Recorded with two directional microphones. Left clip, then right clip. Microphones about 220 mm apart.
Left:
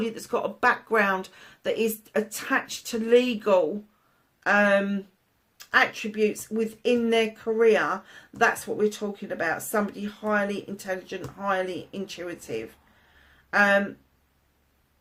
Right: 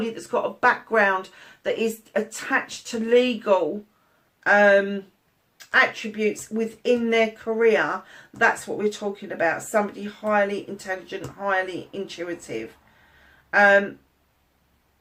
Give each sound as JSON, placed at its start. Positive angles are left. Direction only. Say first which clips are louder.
{"t": 0.0, "sound": "speech", "louder": "right 3 dB", "side_deg": 45}